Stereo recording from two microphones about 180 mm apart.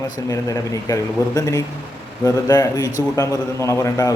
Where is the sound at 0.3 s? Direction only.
20° left (ahead or behind).